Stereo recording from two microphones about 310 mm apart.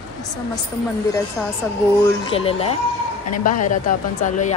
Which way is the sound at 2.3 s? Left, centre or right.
Centre.